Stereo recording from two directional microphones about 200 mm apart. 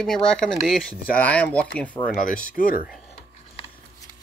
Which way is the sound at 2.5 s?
45° left (ahead or behind).